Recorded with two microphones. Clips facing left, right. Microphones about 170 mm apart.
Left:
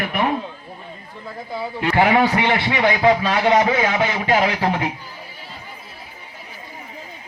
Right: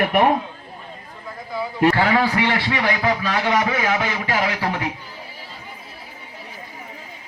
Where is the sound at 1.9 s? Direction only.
20° left (ahead or behind).